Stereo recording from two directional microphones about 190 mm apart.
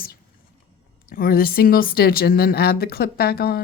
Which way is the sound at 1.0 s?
50° left (ahead or behind).